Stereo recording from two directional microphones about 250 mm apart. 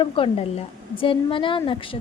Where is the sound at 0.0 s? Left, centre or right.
Left.